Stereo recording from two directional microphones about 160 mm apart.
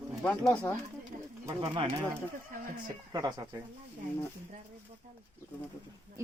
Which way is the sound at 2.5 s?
60° right (ahead or behind).